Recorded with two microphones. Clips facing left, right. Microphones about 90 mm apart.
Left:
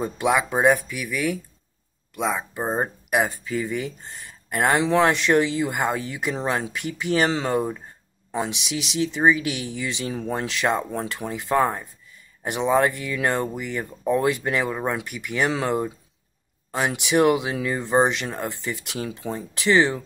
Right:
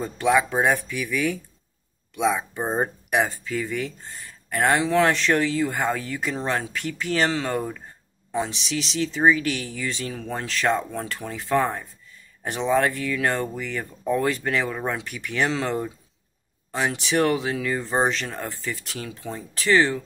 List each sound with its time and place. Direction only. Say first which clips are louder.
0.0 s speech: right 1 dB; 10° left (ahead or behind)